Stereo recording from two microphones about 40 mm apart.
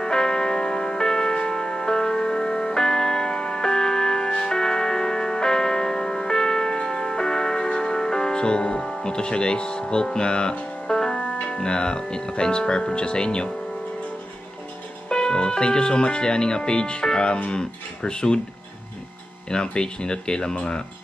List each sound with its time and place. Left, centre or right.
0.0 s music: centre
9.0 s speech: centre
10.9 s music: centre
11.4 s speech: left
15.0 s speech: centre
19.5 s speech: left